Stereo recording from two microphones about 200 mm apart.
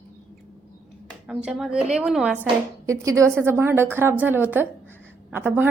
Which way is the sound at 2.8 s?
15° right (ahead or behind).